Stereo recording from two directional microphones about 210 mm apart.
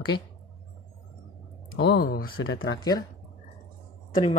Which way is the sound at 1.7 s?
60° left (ahead or behind).